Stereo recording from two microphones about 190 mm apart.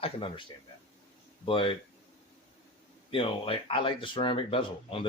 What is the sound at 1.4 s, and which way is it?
Speech, 25° left (ahead or behind).